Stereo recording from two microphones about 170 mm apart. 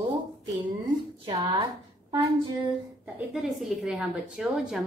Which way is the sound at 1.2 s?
30° right (ahead or behind).